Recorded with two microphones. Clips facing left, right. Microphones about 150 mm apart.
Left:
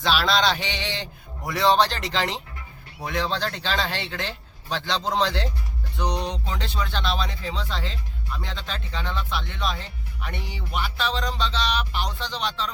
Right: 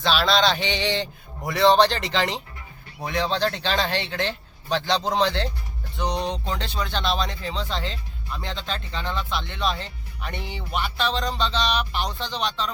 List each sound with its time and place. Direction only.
0.0 s a man's voice: 10° left (ahead or behind)
6.0 s a sound: 5° left (ahead or behind)
6.8 s a man's voice: 5° left (ahead or behind)